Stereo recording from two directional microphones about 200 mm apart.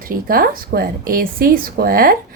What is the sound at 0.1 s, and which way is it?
A woman's voice, 45° right (ahead or behind).